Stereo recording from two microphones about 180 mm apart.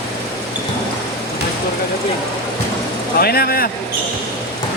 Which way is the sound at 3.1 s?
60° left (ahead or behind).